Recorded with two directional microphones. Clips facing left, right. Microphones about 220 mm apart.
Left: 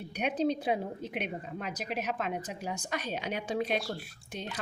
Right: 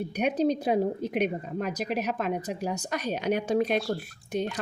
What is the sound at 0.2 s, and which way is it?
A woman's voice, 45° right (ahead or behind).